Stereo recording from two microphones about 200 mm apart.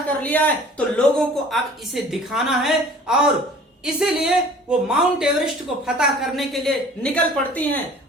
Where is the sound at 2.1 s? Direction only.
Centre (ahead or behind).